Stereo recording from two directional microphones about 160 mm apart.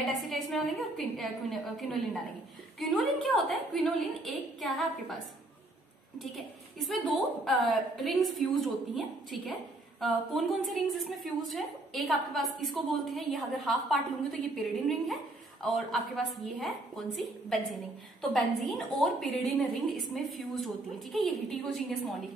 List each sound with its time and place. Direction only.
0.1 s a woman's voice: centre (ahead or behind)